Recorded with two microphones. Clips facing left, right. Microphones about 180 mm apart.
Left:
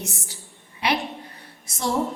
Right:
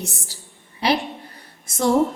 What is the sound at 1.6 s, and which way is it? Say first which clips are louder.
Speech: right 7 dB; 50° right (ahead or behind).